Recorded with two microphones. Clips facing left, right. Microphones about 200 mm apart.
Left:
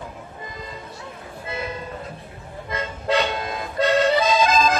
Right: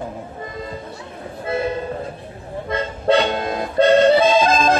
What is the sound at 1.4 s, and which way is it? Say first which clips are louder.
Train: right 9 dB; 30° right (ahead or behind).